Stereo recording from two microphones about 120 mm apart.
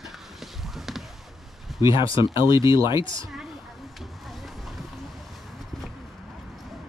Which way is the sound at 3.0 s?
40° left (ahead or behind).